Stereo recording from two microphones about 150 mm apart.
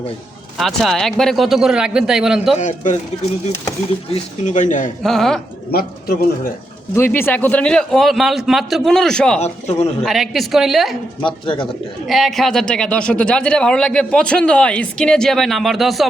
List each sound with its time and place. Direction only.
0.6 s speech: centre (ahead or behind)
2.6 s speech: 50° left (ahead or behind)
4.1 s speech: 55° left (ahead or behind)
5.0 s speech: 5° left (ahead or behind)
5.7 s speech: 85° left
6.9 s speech: 15° left (ahead or behind)
9.4 s speech: 45° left (ahead or behind)
10.0 s speech: centre (ahead or behind)
11.2 s speech: 35° left (ahead or behind)
12.0 s speech: centre (ahead or behind)